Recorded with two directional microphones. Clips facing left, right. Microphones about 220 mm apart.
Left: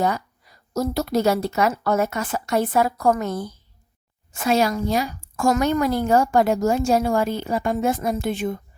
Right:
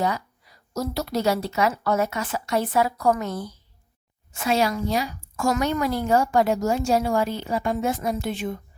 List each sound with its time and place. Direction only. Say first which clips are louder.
0.0 s a woman's voice: left 3 dB; 50° left (ahead or behind)